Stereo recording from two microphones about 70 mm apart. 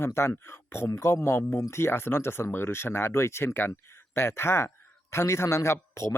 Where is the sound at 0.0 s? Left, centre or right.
Left.